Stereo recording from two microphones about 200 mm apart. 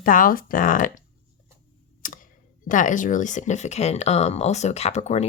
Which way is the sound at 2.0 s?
40° left (ahead or behind).